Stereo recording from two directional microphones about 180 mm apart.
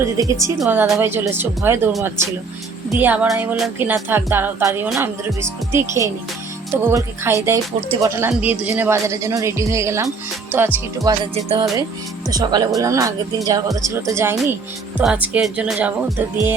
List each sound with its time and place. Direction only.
0.0 s speech: 15° right (ahead or behind)
0.6 s speech: 5° right (ahead or behind)
6.8 s speech: 15° right (ahead or behind)
11.2 s music: 25° right (ahead or behind)
12.3 s speech: 20° right (ahead or behind); by 16.1 s 5° right (ahead or behind)